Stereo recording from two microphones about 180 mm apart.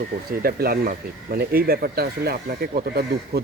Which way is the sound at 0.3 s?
55° right (ahead or behind).